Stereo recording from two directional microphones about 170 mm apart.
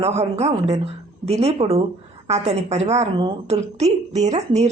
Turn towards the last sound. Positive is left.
turn(degrees=-40)  # may be behind; listen again after turning